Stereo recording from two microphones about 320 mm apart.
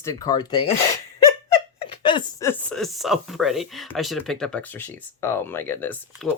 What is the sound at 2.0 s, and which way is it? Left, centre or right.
Speech, centre.